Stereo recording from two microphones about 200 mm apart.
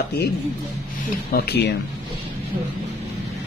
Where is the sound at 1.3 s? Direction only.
50° left (ahead or behind).